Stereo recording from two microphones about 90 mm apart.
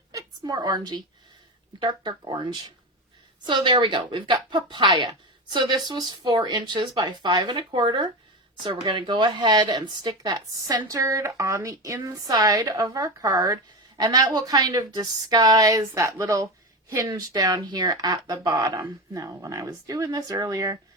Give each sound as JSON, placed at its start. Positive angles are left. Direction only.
{"t": 0.1, "sound": "a woman's voice", "side_deg": -45}